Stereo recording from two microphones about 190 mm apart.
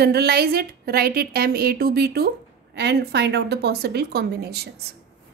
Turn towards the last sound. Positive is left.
turn(degrees=-55)  # may be behind; listen again after turning